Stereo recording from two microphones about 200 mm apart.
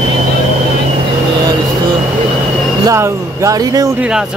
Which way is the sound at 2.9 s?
15° right (ahead or behind).